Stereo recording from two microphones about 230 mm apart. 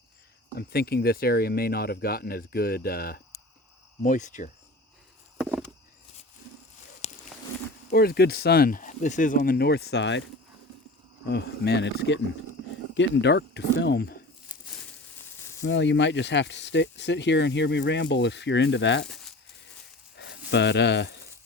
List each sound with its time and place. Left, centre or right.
0.5 s speech: left
5.4 s a sound: centre
7.0 s a sound: left
7.9 s speech: left
11.3 s speech: left
15.6 s speech: left
20.1 s speech: left